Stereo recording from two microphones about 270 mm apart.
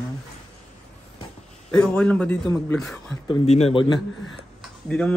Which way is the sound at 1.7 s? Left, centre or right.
Centre.